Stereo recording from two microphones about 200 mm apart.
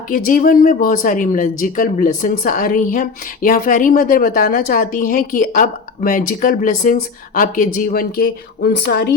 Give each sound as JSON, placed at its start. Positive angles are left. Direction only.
{"t": 0.1, "sound": "speech", "side_deg": 45}